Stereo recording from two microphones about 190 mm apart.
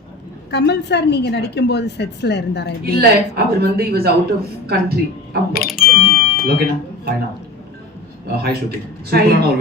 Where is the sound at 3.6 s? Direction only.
55° right (ahead or behind).